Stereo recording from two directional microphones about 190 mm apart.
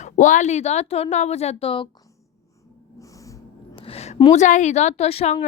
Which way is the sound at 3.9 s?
35° left (ahead or behind).